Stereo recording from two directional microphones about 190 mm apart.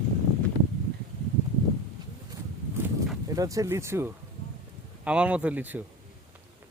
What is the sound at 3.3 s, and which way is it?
Speech, 15° right (ahead or behind).